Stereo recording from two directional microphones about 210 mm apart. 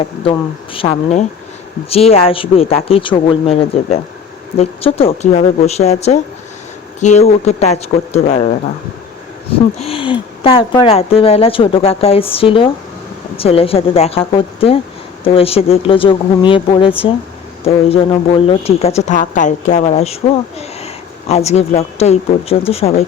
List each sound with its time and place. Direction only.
0.0 s speech: 25° left (ahead or behind)
1.9 s speech: 30° left (ahead or behind)